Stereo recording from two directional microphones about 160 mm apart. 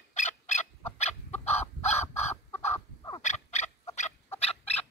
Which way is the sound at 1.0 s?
45° left (ahead or behind).